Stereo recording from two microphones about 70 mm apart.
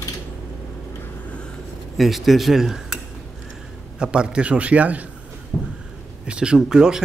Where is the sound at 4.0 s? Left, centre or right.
Centre.